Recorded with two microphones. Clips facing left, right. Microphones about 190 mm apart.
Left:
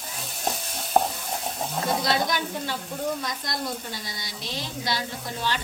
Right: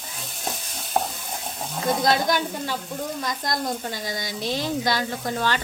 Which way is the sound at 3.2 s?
90° right.